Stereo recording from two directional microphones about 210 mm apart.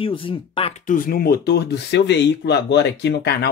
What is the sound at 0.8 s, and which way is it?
Speech, 40° left (ahead or behind).